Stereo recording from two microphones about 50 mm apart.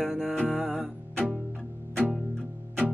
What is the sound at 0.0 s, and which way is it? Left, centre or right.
Music, centre.